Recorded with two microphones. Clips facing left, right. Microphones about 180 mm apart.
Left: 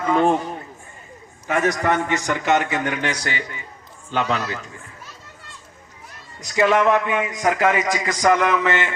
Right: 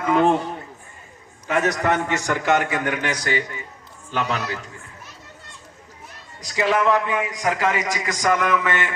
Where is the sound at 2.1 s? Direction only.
15° left (ahead or behind).